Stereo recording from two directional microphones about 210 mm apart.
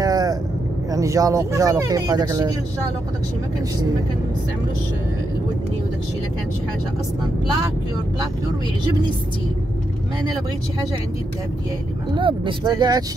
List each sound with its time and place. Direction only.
0.0 s vehicle: 20° right (ahead or behind)
0.9 s speech: 15° right (ahead or behind)
12.2 s speech: 25° right (ahead or behind)